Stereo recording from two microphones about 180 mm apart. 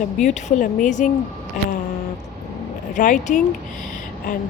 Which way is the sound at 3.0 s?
45° left (ahead or behind).